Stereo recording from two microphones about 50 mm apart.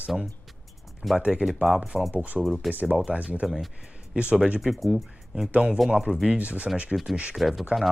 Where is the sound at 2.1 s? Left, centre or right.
Right.